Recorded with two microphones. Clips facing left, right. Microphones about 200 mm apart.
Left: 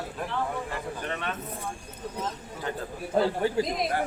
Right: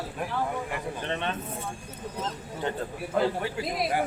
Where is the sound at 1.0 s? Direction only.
25° right (ahead or behind).